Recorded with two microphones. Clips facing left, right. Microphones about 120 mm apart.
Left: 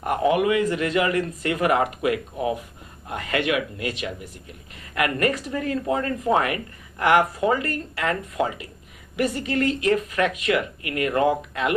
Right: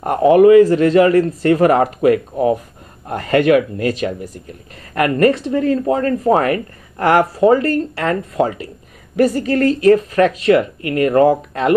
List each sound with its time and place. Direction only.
0.0 s speech: 35° right (ahead or behind)